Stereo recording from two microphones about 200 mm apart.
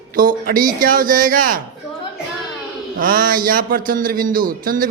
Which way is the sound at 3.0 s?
45° right (ahead or behind).